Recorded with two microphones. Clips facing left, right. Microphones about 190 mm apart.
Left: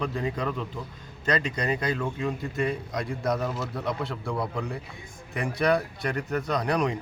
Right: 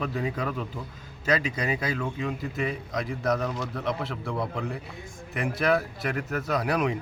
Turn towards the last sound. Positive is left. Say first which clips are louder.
# even
turn(degrees=-5)  # may be behind; listen again after turning